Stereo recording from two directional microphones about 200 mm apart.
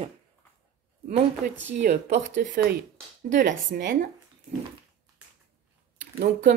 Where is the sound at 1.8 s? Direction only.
35° right (ahead or behind).